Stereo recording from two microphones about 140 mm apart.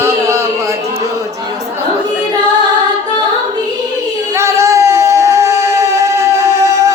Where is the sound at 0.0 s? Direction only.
20° right (ahead or behind).